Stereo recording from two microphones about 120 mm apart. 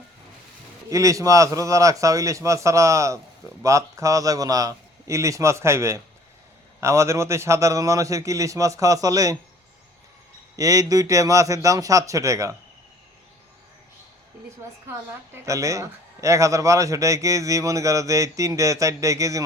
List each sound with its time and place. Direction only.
0.9 s a man's voice: 25° right (ahead or behind)
10.6 s a man's voice: 30° right (ahead or behind)
15.4 s a man's voice: 25° right (ahead or behind)